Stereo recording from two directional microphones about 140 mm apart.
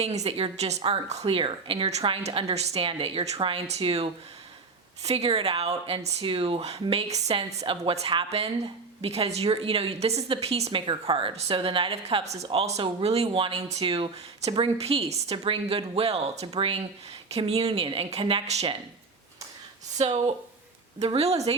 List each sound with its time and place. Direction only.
0.0 s a woman's voice: 50° right (ahead or behind)
21.0 s a woman's voice: 50° right (ahead or behind)